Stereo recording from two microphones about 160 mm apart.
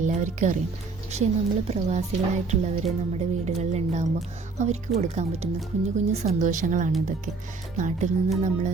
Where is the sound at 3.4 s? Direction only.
45° right (ahead or behind).